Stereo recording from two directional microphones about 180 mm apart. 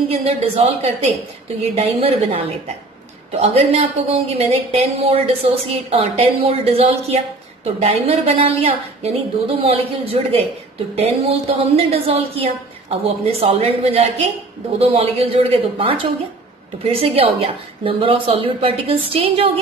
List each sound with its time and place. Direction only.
0.1 s a woman's voice: 35° right (ahead or behind)